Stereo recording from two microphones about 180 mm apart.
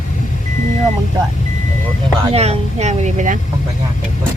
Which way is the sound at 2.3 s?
35° right (ahead or behind).